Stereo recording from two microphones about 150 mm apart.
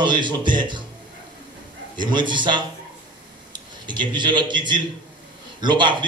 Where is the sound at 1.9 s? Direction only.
30° right (ahead or behind).